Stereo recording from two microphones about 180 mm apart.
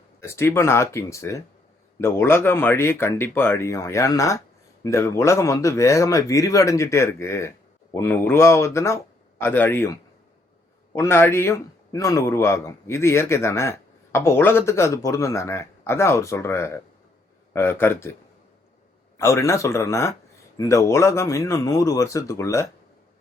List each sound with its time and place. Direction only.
0.2 s a man's voice: 15° left (ahead or behind)